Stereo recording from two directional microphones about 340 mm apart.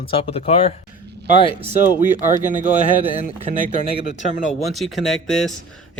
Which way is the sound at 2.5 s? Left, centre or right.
Right.